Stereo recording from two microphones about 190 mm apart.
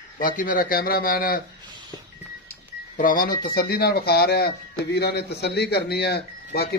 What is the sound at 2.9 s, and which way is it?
A man's voice, 45° left (ahead or behind).